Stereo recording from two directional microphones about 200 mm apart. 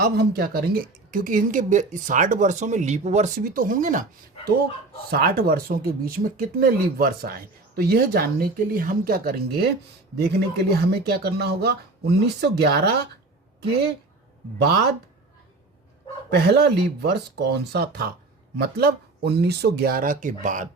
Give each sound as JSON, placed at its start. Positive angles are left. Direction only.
{"t": 0.0, "sound": "speech", "side_deg": -50}
{"t": 5.1, "sound": "speech", "side_deg": -50}
{"t": 16.3, "sound": "speech", "side_deg": -55}